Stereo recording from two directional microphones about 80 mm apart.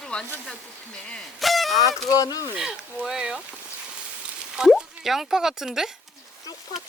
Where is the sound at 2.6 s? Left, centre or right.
Centre.